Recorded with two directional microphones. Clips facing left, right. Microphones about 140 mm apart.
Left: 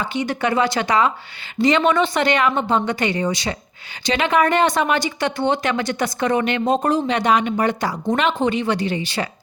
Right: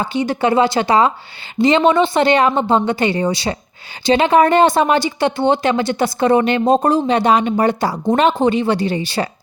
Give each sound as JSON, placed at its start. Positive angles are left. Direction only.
{"t": 0.0, "sound": "speech", "side_deg": -35}